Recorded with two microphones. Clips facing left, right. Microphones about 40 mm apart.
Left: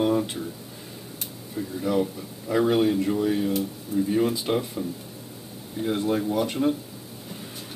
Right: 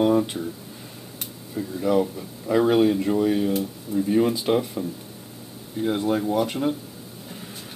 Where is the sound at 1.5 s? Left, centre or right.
Centre.